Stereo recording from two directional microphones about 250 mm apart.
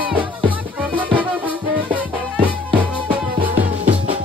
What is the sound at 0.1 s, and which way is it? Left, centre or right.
Music, centre.